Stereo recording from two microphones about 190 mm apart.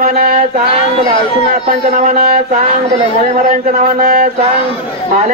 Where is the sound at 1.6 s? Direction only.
45° right (ahead or behind).